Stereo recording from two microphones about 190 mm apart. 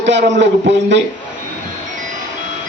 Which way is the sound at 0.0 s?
70° right (ahead or behind).